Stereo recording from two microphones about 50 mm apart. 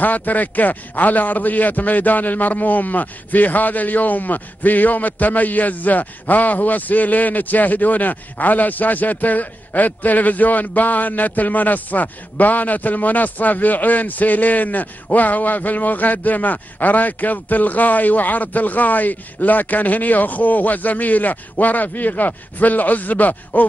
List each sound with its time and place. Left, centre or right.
0.0 s a man's voice: left